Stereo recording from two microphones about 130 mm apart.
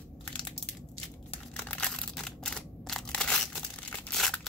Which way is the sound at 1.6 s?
10° left (ahead or behind).